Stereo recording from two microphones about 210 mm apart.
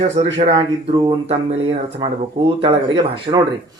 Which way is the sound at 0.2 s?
30° right (ahead or behind).